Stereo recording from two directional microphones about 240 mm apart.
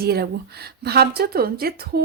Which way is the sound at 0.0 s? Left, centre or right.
Right.